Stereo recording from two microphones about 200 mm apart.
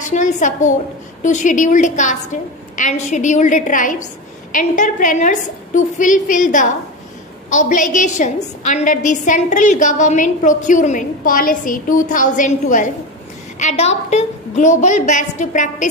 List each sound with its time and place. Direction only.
0.0 s a woman's voice: 35° left (ahead or behind)